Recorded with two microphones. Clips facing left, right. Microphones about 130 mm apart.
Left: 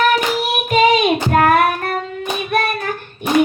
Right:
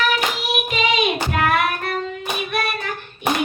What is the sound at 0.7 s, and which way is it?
Music, 45° left (ahead or behind).